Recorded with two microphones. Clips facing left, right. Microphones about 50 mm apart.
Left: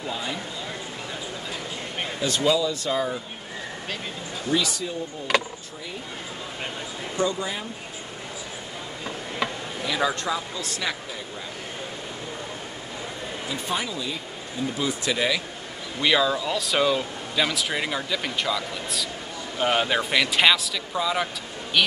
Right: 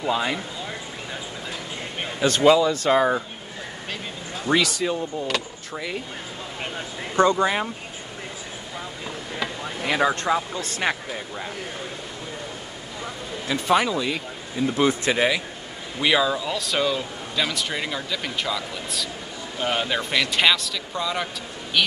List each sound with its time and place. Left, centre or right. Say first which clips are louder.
0.1 s speech: right 8 dB; right
2.2 s speech: right 6 dB; right
4.5 s speech: right 4 dB; right
7.2 s speech: right 8 dB; right
9.9 s speech: right 4 dB; right
13.5 s speech: right 9 dB; right
15.0 s a man's voice: right 3 dB; right
16.0 s speech: right 1 dB; centre